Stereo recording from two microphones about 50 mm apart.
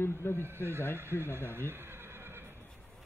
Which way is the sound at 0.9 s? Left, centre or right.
Right.